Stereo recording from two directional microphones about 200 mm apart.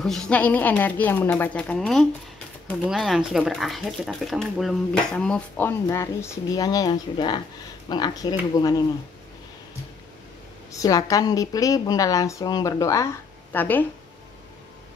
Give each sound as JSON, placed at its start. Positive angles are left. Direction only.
{"t": 0.0, "sound": "a woman's voice", "side_deg": 5}
{"t": 10.7, "sound": "a woman's voice", "side_deg": 15}